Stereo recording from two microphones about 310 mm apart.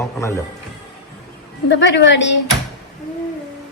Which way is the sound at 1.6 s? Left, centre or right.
Left.